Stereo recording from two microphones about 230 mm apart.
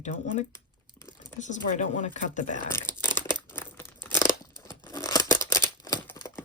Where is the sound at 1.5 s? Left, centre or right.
Left.